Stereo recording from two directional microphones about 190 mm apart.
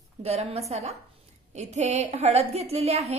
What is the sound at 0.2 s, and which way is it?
A woman's voice, 35° right (ahead or behind).